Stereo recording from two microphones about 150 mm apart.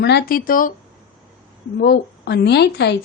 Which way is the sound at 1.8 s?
90° left.